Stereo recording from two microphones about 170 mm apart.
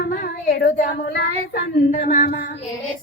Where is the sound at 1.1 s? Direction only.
75° left (ahead or behind).